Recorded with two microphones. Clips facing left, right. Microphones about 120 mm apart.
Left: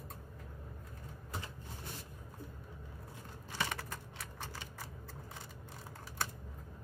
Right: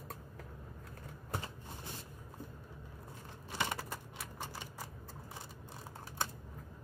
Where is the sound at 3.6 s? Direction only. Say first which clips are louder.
Right 1 dB; 15° right (ahead or behind).